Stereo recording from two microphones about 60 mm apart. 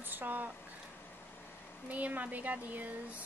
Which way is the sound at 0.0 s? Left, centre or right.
Right.